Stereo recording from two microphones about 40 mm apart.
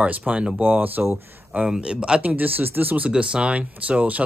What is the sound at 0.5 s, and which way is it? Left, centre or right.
Speech, right.